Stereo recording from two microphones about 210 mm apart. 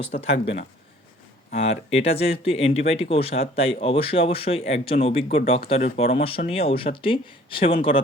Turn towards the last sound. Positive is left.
turn(degrees=25)  # may be behind; listen again after turning